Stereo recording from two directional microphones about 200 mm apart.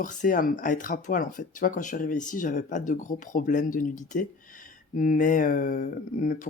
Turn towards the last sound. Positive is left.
turn(degrees=40)  # may be behind; listen again after turning